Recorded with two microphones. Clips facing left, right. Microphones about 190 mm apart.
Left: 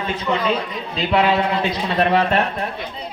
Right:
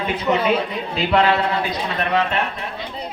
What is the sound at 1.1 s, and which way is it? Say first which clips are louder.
Speech: even; 5° left (ahead or behind).